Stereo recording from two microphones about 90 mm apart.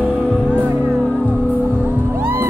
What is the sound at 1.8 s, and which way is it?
Music, 25° right (ahead or behind).